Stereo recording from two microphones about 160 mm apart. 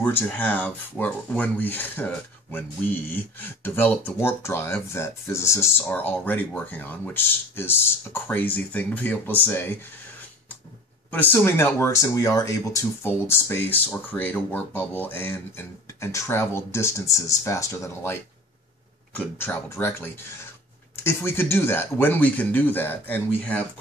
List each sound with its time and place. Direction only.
0.0 s speech: 10° left (ahead or behind)
11.1 s speech: 10° left (ahead or behind)